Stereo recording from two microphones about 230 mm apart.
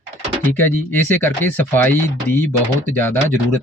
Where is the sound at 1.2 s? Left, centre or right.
Centre.